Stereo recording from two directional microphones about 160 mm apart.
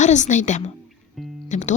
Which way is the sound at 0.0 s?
50° left (ahead or behind).